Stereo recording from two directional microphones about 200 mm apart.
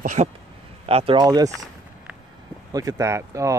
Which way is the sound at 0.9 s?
25° right (ahead or behind).